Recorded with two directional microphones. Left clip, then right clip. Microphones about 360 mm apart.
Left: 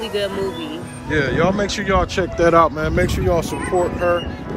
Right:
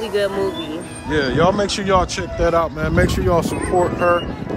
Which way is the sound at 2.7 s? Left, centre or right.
Centre.